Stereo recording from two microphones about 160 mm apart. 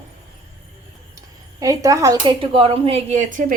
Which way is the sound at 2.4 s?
35° right (ahead or behind).